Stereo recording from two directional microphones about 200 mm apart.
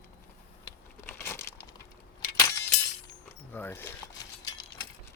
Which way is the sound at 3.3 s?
10° left (ahead or behind).